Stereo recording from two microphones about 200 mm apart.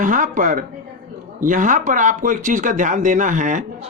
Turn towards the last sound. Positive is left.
turn(degrees=-40)  # may be behind; listen again after turning